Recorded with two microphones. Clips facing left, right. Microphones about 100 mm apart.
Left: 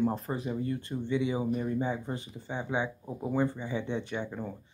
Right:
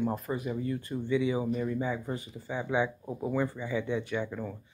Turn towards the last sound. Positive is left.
turn(degrees=25)  # may be behind; listen again after turning